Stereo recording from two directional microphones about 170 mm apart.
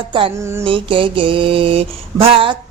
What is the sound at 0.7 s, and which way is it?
Mantra, 30° right (ahead or behind).